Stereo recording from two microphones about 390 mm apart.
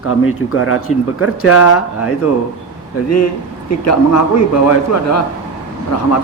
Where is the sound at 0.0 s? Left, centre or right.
Left.